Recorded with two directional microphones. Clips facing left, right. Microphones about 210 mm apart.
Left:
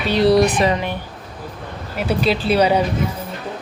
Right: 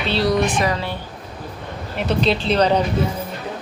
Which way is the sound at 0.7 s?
15° left (ahead or behind).